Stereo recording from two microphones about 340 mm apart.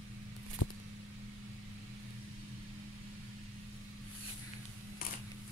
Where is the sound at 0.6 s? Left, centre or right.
Left.